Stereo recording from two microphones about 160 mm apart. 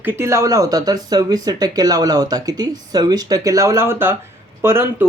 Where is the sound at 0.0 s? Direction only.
15° right (ahead or behind).